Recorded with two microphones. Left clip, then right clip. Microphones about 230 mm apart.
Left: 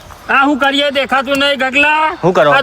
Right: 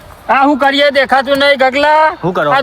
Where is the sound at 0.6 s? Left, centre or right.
Right.